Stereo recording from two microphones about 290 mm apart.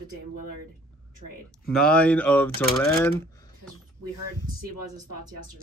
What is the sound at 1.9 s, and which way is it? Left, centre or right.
Speech, centre.